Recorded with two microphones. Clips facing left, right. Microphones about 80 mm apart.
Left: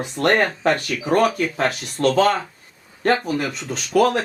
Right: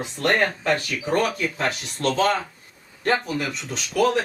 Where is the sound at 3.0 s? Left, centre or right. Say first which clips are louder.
Left 3 dB; left.